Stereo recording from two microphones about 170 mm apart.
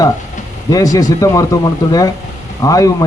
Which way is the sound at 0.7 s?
20° left (ahead or behind).